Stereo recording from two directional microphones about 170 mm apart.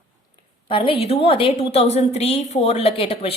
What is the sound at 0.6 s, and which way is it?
A woman's voice, 30° left (ahead or behind).